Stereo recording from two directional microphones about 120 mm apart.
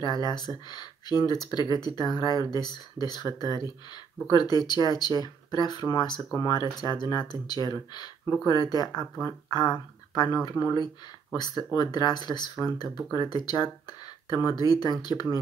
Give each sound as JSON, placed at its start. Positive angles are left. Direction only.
{"t": 0.0, "sound": "speech", "side_deg": 35}